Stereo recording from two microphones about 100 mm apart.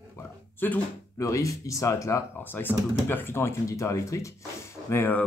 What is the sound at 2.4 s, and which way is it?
Speech, 20° left (ahead or behind).